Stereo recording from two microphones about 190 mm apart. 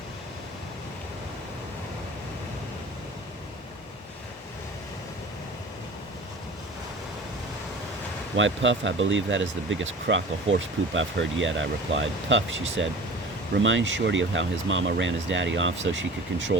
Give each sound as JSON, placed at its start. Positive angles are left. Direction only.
{"t": 8.4, "sound": "speech", "side_deg": -75}